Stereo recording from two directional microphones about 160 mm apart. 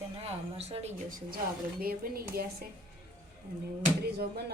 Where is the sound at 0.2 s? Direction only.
40° right (ahead or behind).